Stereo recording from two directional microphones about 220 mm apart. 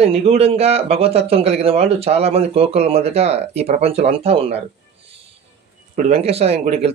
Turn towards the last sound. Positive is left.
turn(degrees=-30)  # may be behind; listen again after turning